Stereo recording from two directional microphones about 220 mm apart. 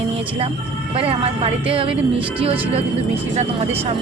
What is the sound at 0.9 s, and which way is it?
Speech, 25° right (ahead or behind).